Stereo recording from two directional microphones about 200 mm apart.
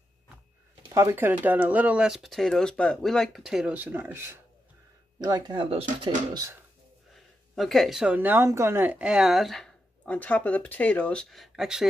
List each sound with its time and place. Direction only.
0.9 s speech: 15° right (ahead or behind)
7.5 s speech: centre (ahead or behind)